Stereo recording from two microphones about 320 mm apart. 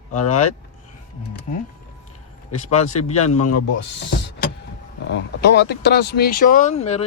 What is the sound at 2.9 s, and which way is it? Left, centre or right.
Speech, left.